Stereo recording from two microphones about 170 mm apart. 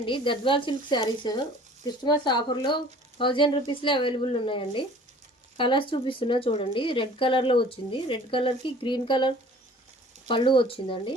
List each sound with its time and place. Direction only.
0.0 s speech: 30° left (ahead or behind)